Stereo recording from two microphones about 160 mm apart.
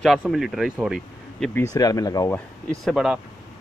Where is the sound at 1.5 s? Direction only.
20° left (ahead or behind).